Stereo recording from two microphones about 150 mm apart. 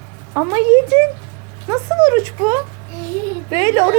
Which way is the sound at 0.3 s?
20° right (ahead or behind).